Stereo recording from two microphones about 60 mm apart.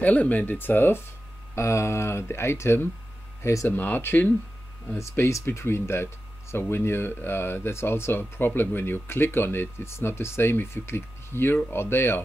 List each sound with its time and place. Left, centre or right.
0.0 s speech: left
1.5 s speech: left
3.6 s speech: left
5.4 s speech: left